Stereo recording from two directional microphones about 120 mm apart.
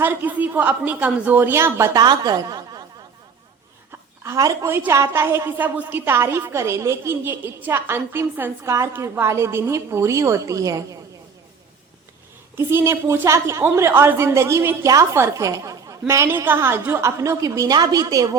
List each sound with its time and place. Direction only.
0.0 s a woman's voice: 15° right (ahead or behind)
2.0 s a woman's voice: 35° right (ahead or behind)
4.2 s a woman's voice: 25° right (ahead or behind)
12.5 s a woman's voice: 20° right (ahead or behind)